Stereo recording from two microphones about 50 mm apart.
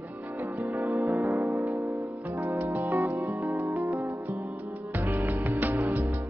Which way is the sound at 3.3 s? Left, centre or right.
Right.